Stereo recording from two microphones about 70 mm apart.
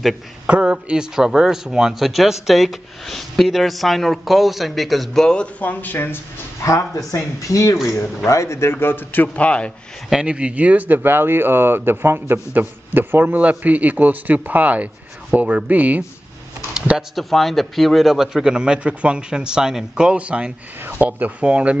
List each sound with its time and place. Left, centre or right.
0.5 s speech: centre; by 6.1 s left
6.6 s speech: left; by 9.7 s centre
10.0 s speech: centre
16.7 s a sound: centre
17.1 s a man's voice: centre